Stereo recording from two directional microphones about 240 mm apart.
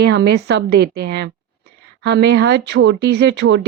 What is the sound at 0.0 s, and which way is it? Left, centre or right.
Speech, right.